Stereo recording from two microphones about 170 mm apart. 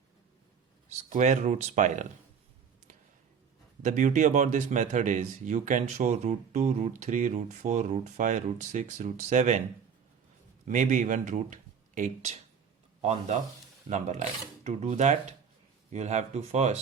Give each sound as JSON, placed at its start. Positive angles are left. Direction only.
{"t": 0.9, "sound": "speech", "side_deg": -40}
{"t": 3.8, "sound": "speech", "side_deg": -45}
{"t": 10.7, "sound": "speech", "side_deg": -45}